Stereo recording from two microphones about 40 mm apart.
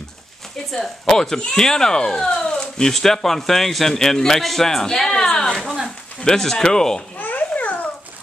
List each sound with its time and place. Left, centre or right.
0.7 s speech: centre
5.4 s a sound: centre
6.2 s speech: centre
7.2 s babbling: left